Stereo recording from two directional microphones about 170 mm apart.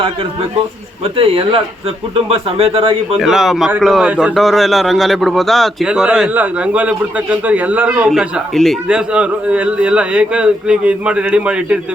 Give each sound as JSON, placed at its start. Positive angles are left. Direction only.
{"t": 1.0, "sound": "a man's voice", "side_deg": -35}
{"t": 3.2, "sound": "a man's voice", "side_deg": 0}